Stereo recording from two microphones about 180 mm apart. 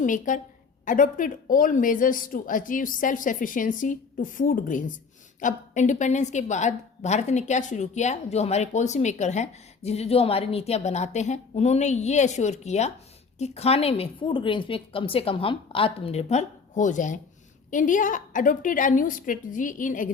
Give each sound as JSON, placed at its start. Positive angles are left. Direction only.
{"t": 0.0, "sound": "a woman's voice", "side_deg": 45}